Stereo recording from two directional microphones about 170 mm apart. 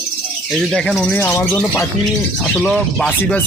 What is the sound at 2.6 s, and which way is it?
Speech, 5° left (ahead or behind).